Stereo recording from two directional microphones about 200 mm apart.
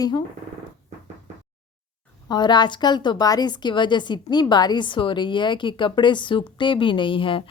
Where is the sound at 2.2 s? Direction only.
20° left (ahead or behind).